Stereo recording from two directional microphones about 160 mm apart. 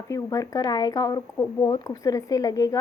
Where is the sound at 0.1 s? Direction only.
20° left (ahead or behind).